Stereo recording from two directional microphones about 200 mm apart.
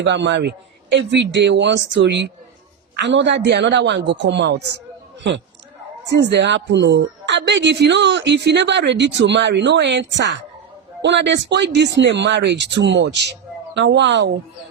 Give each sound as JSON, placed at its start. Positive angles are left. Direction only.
{"t": 0.0, "sound": "a woman's voice", "side_deg": -60}
{"t": 6.1, "sound": "a woman's voice", "side_deg": -60}